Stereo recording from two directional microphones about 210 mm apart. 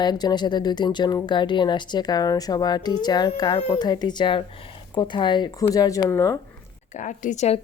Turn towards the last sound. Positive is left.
turn(degrees=35)  # may be behind; listen again after turning